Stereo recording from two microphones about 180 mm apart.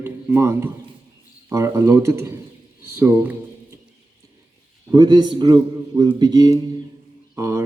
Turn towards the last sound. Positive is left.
turn(degrees=-15)  # may be behind; listen again after turning